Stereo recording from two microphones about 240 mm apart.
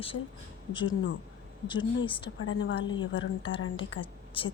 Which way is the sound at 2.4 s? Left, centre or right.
Left.